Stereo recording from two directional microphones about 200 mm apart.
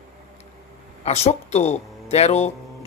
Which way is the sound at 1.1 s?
35° left (ahead or behind).